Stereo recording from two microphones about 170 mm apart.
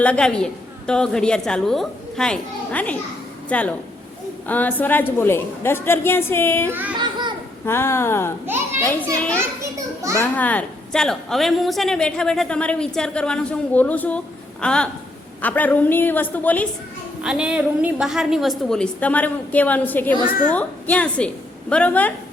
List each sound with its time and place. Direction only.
0.0 s a woman's voice: 5° left (ahead or behind)
6.9 s a sound: 25° right (ahead or behind)
7.6 s a woman's voice: 15° left (ahead or behind)
8.4 s a child's voice: 15° right (ahead or behind)
9.4 s children playing: 15° right (ahead or behind)
10.2 s a woman's voice: 10° left (ahead or behind)
17.2 s a woman's voice: 5° right (ahead or behind)